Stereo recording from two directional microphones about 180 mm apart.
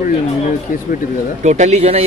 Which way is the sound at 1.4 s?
40° right (ahead or behind).